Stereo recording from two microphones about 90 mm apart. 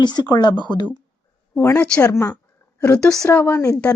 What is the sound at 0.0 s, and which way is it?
Speech, 50° left (ahead or behind).